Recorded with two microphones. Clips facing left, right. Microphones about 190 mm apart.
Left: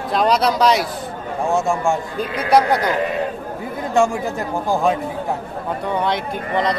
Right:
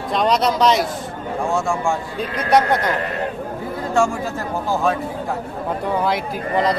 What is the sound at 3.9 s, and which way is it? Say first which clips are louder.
Speech: left 2 dB; 15° left (ahead or behind).